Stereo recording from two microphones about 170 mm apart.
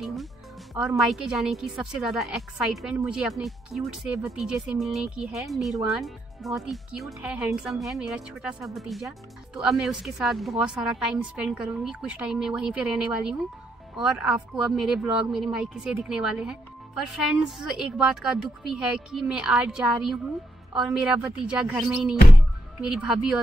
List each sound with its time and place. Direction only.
0.0 s speech: centre (ahead or behind)